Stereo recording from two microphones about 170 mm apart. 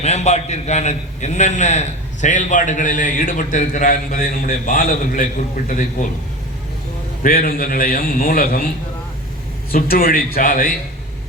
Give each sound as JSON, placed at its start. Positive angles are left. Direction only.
{"t": 0.0, "sound": "a man's voice", "side_deg": 40}
{"t": 7.2, "sound": "a man's voice", "side_deg": 60}
{"t": 9.7, "sound": "a man's voice", "side_deg": 60}